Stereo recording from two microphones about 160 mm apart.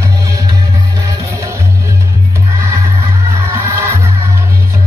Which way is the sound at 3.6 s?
15° right (ahead or behind).